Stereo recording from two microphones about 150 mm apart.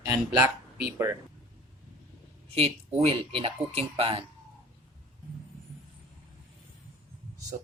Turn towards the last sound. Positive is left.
turn(degrees=-60)  # may be behind; listen again after turning